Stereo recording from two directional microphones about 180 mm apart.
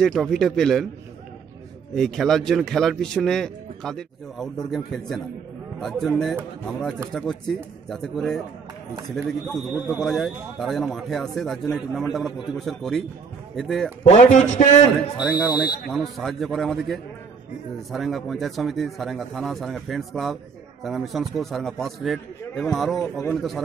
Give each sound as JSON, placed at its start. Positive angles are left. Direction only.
{"t": 0.0, "sound": "a man's voice", "side_deg": 0}
{"t": 2.0, "sound": "a man's voice", "side_deg": 0}
{"t": 14.0, "sound": "a man's voice", "side_deg": 40}
{"t": 15.5, "sound": "speech", "side_deg": 25}
{"t": 15.9, "sound": "a man's voice", "side_deg": 0}